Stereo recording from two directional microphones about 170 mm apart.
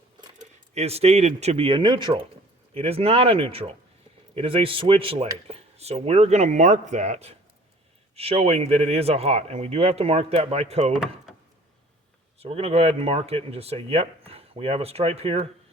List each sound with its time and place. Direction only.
0.7 s speech: 40° right (ahead or behind)
11.3 s a sound: centre (ahead or behind)
12.4 s speech: 35° right (ahead or behind)